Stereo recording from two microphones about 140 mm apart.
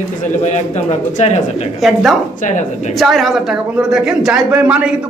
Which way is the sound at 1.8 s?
Centre (ahead or behind).